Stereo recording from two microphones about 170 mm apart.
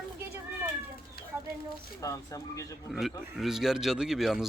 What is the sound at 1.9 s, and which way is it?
Speech, 20° left (ahead or behind).